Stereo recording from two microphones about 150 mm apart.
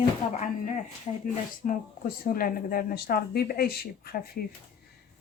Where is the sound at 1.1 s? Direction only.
40° left (ahead or behind).